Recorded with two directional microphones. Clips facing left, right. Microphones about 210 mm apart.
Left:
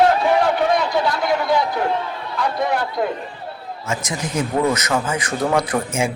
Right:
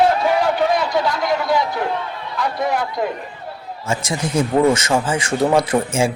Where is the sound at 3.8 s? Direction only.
30° right (ahead or behind).